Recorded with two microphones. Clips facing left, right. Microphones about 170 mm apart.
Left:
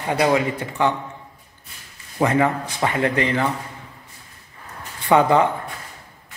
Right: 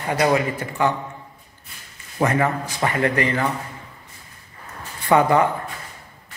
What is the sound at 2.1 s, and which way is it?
Speech, 10° left (ahead or behind).